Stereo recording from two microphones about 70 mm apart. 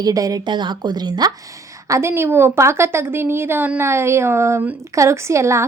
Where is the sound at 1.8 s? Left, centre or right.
Right.